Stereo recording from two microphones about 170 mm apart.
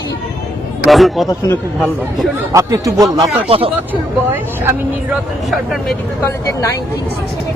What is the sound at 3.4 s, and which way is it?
Speech, 35° right (ahead or behind).